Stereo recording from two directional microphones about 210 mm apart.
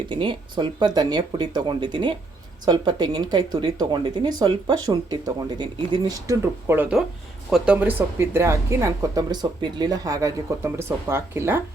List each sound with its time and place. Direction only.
0.1 s speech: 25° right (ahead or behind)